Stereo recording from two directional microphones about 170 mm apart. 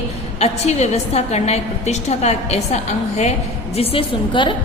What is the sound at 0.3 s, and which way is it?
A woman's voice, 40° left (ahead or behind).